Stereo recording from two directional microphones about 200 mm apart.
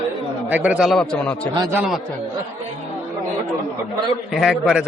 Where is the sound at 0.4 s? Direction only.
5° right (ahead or behind).